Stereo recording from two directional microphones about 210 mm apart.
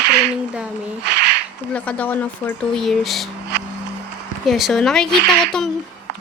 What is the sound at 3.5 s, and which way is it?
Music, 55° right (ahead or behind).